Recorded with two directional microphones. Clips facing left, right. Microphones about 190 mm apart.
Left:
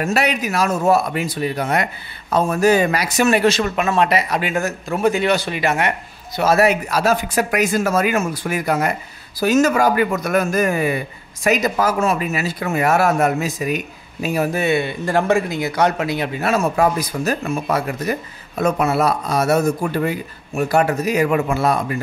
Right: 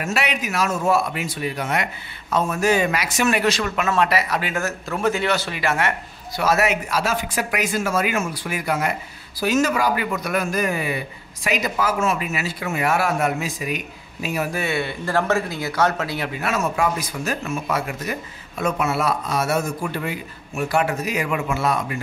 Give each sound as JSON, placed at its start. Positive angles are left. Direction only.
{"t": 0.0, "sound": "speech", "side_deg": 40}
{"t": 6.5, "sound": "a man's voice", "side_deg": 35}
{"t": 14.5, "sound": "speech", "side_deg": 20}
{"t": 16.3, "sound": "speech", "side_deg": 30}